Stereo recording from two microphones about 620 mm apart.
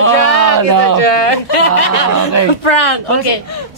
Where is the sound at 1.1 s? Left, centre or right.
Left.